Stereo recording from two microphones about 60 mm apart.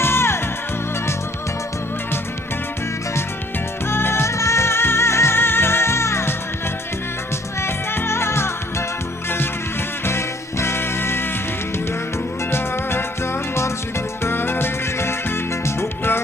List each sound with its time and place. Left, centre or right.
0.0 s music: left
3.8 s music: left
7.6 s music: left
10.1 s music: left
12.5 s music: left
14.3 s music: left